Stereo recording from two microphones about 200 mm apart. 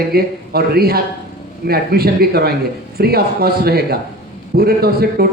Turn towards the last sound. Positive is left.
turn(degrees=-50)  # may be behind; listen again after turning